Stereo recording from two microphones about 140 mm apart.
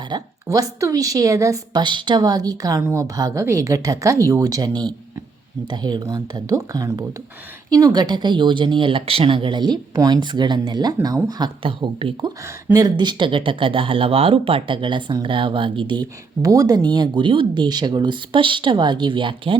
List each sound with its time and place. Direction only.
0.1 s a woman's voice: 25° right (ahead or behind)